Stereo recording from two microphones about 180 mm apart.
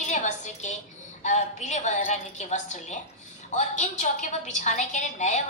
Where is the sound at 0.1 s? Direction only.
40° left (ahead or behind).